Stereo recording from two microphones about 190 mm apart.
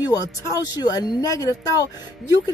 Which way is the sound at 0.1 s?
20° left (ahead or behind).